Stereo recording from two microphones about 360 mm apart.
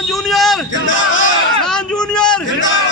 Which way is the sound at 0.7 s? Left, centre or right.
Left.